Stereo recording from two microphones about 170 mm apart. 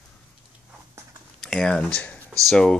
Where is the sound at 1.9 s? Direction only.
10° left (ahead or behind).